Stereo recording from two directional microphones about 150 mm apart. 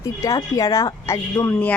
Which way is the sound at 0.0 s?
20° left (ahead or behind).